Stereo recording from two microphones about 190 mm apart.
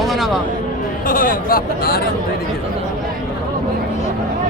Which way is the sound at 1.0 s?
45° left (ahead or behind).